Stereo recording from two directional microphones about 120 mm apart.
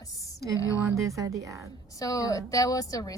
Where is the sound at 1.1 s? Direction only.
25° right (ahead or behind).